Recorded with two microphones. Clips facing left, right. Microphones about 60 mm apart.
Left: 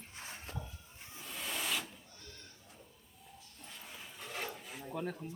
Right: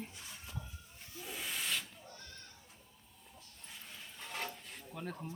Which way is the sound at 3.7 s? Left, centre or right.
Centre.